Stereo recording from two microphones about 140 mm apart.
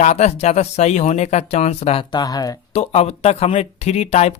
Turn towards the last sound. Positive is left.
turn(degrees=55)  # may be behind; listen again after turning